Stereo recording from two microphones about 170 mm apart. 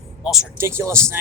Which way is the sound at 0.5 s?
15° right (ahead or behind).